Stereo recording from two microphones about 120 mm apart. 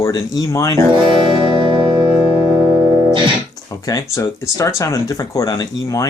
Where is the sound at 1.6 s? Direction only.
40° right (ahead or behind).